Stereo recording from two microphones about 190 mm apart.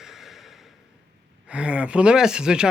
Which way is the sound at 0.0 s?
Centre (ahead or behind).